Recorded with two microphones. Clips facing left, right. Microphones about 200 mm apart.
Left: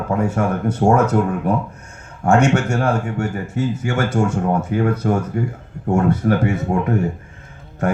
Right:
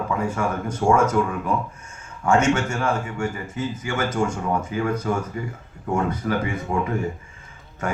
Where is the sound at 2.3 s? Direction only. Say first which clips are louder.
Left 4 dB; 60° left (ahead or behind); by 6.8 s 45° left (ahead or behind).